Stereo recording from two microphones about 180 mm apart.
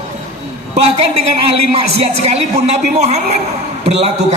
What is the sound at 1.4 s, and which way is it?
A man's voice, 35° right (ahead or behind).